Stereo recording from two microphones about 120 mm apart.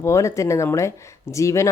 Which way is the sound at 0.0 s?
25° left (ahead or behind).